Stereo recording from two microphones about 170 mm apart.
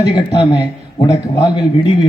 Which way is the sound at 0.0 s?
25° left (ahead or behind).